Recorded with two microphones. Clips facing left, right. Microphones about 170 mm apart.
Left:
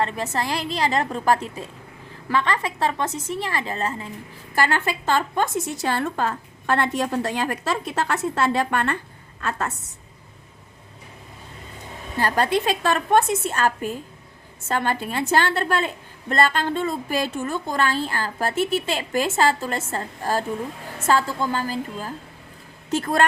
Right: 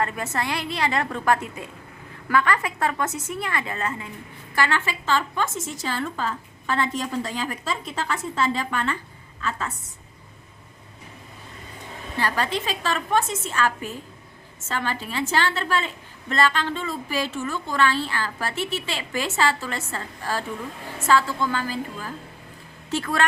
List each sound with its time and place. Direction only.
0.0 s a woman's voice: 35° left (ahead or behind)
4.5 s a woman's voice: 45° left (ahead or behind)
5.7 s a woman's voice: 60° left (ahead or behind)
12.1 s a woman's voice: 45° left (ahead or behind)